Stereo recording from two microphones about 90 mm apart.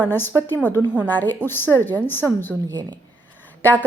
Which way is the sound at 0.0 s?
25° left (ahead or behind).